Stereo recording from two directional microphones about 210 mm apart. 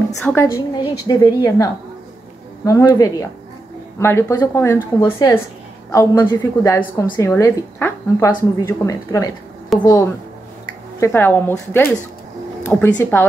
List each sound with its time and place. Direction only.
0.2 s a woman's voice: 10° left (ahead or behind)
9.7 s a woman's voice: centre (ahead or behind)
11.0 s a woman's voice: 10° left (ahead or behind)